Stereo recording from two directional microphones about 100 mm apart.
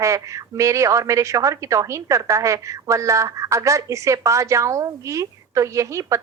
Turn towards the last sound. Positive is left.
turn(degrees=-30)  # may be behind; listen again after turning